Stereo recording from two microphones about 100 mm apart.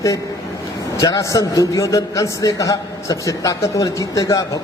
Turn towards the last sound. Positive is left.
turn(degrees=35)  # may be behind; listen again after turning